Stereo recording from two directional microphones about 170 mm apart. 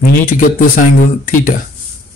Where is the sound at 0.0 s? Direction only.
55° left (ahead or behind).